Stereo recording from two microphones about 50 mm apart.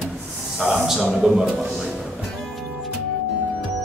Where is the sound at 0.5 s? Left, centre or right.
Centre.